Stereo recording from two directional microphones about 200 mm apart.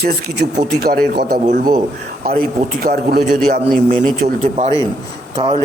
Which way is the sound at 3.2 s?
35° right (ahead or behind).